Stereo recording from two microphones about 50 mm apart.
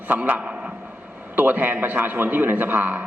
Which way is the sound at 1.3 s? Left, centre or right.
Right.